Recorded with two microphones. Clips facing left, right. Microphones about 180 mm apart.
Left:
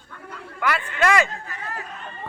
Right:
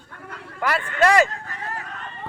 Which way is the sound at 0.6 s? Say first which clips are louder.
Right 2 dB; 35° right (ahead or behind).